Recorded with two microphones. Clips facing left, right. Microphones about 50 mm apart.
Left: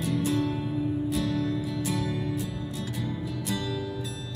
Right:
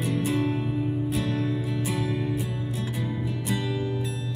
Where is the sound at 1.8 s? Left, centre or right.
Centre.